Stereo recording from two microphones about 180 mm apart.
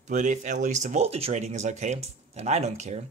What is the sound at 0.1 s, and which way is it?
Speech, 40° right (ahead or behind).